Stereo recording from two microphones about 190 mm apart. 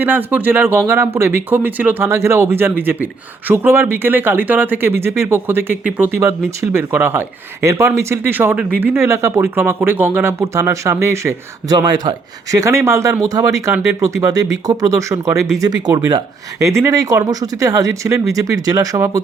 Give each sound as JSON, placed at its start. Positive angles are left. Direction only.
{"t": 0.0, "sound": "speech", "side_deg": -10}